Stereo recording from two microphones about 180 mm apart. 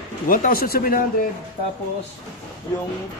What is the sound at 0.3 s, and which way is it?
Speech, 50° left (ahead or behind).